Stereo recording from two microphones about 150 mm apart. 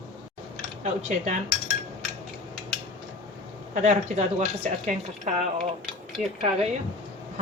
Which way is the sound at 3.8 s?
50° right (ahead or behind).